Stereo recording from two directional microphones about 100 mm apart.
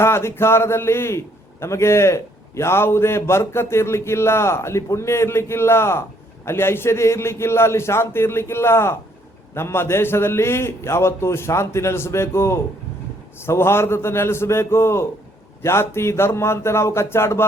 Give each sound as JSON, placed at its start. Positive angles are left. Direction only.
{"t": 0.0, "sound": "a man's voice", "side_deg": 25}